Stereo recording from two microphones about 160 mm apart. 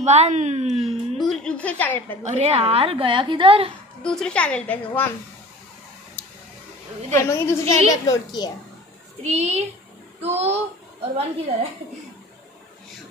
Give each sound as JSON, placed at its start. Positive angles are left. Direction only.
{"t": 0.0, "sound": "a woman's voice", "side_deg": -45}
{"t": 0.7, "sound": "speech", "side_deg": 0}
{"t": 2.2, "sound": "a woman's voice", "side_deg": -40}
{"t": 4.0, "sound": "a woman's voice", "side_deg": 5}
{"t": 7.2, "sound": "a woman's voice", "side_deg": 15}
{"t": 9.2, "sound": "a woman's voice", "side_deg": -40}